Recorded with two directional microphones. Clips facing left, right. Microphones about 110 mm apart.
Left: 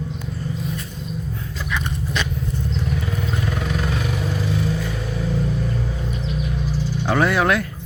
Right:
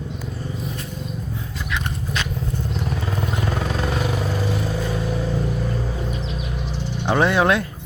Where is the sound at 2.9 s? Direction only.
35° right (ahead or behind).